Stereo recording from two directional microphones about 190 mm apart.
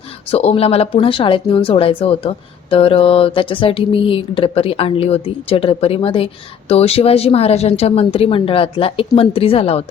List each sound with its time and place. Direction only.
0.3 s a woman's voice: 30° left (ahead or behind)